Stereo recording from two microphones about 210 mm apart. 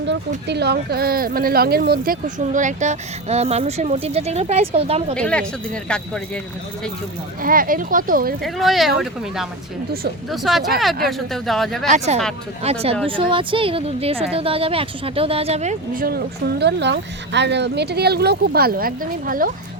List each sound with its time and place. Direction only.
0.4 s speech: 50° right (ahead or behind); by 5.1 s 30° right (ahead or behind)
5.1 s speech: 5° left (ahead or behind)
7.4 s speech: 40° right (ahead or behind)
8.4 s speech: centre (ahead or behind)
11.9 s speech: 30° right (ahead or behind)